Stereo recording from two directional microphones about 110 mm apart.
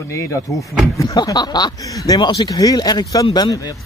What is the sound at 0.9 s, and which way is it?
Speech, 35° left (ahead or behind).